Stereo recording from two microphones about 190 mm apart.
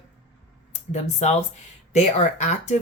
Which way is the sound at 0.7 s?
35° left (ahead or behind).